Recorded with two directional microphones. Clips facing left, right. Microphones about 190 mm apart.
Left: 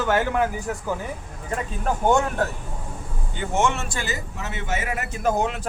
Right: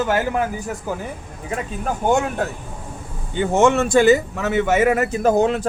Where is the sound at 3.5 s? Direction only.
40° right (ahead or behind).